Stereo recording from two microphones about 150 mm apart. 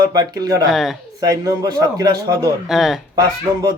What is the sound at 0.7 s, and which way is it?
Speech, centre (ahead or behind).